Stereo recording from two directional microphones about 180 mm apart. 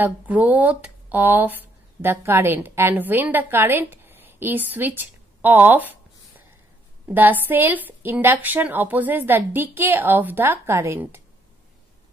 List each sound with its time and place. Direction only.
0.0 s speech: 10° right (ahead or behind)
7.4 s a woman's voice: 10° right (ahead or behind)